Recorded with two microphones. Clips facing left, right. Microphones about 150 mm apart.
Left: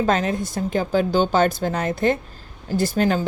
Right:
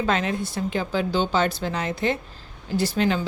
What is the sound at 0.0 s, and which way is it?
A woman's voice, 40° left (ahead or behind).